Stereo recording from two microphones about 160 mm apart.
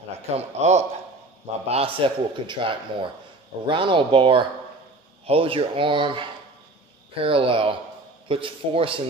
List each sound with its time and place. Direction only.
0.6 s a man's voice: 45° right (ahead or behind)